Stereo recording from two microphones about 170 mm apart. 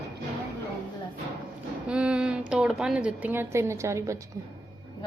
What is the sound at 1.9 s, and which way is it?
A woman's voice, 5° right (ahead or behind).